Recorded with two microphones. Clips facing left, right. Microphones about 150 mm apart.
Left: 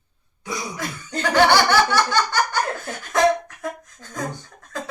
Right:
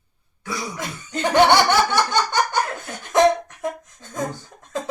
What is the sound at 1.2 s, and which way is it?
Speech, 20° right (ahead or behind).